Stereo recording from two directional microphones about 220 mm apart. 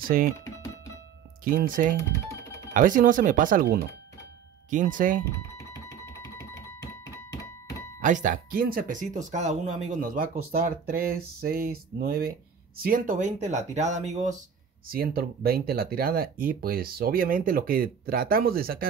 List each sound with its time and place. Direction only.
0.1 s speech: 40° right (ahead or behind)
1.4 s speech: 40° right (ahead or behind)
2.0 s music: 15° left (ahead or behind)
2.7 s speech: 35° right (ahead or behind)
8.0 s speech: 35° right (ahead or behind)
14.9 s speech: 45° right (ahead or behind)